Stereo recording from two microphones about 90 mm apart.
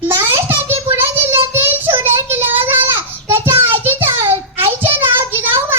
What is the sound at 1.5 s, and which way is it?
Child singing, 25° right (ahead or behind).